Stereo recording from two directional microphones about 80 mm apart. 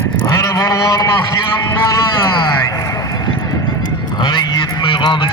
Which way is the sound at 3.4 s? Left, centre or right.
Left.